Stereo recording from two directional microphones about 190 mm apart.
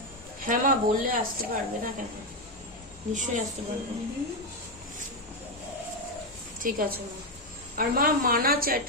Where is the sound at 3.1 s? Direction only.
40° right (ahead or behind).